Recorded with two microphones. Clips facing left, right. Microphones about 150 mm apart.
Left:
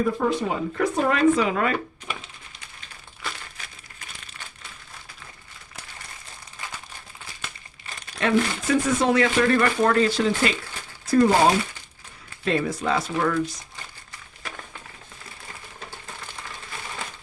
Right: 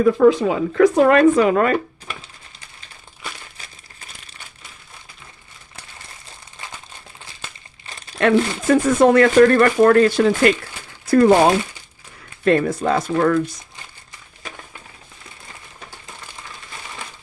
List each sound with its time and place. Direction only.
0.0 s speech: 90° right
0.8 s speech: 75° right (ahead or behind); by 1.7 s 50° right (ahead or behind)
8.2 s speech: 55° right (ahead or behind)
11.0 s crumpling: 65° right (ahead or behind)
12.5 s speech: 50° right (ahead or behind)